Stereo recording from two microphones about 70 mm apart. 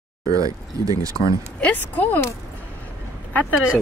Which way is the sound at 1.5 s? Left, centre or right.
Left.